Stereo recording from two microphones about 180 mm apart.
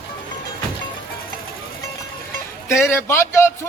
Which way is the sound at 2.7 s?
15° left (ahead or behind).